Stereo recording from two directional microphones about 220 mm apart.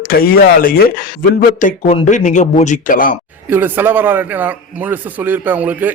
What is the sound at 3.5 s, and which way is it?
A man's voice, 10° right (ahead or behind).